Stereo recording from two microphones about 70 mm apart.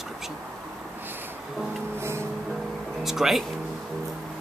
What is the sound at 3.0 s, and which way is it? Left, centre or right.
Speech, centre.